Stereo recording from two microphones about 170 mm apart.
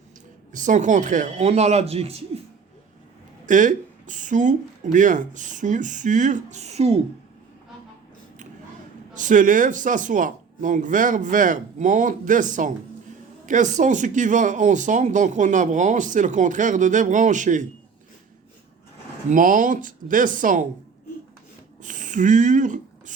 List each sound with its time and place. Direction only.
0.5 s speech: 50° right (ahead or behind)
3.4 s speech: 50° right (ahead or behind)
9.1 s speech: 50° right (ahead or behind)
19.3 s speech: 50° right (ahead or behind)
21.8 s speech: 50° right (ahead or behind)